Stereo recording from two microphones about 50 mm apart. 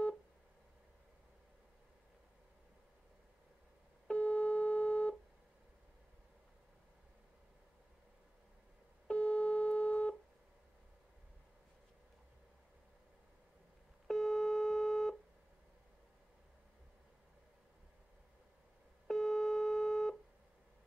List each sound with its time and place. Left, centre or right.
4.1 s busy signal: left
9.0 s busy signal: left
14.0 s busy signal: centre
19.0 s busy signal: centre